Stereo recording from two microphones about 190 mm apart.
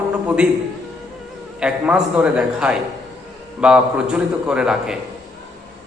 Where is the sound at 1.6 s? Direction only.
5° right (ahead or behind).